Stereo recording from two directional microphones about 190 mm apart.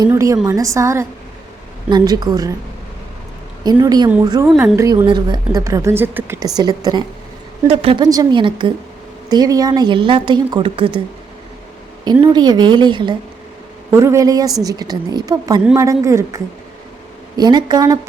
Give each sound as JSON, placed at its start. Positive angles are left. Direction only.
{"t": 0.0, "sound": "a woman's voice", "side_deg": -15}
{"t": 3.6, "sound": "a woman's voice", "side_deg": -20}
{"t": 5.0, "sound": "a woman's voice", "side_deg": -25}
{"t": 12.2, "sound": "a woman's voice", "side_deg": -20}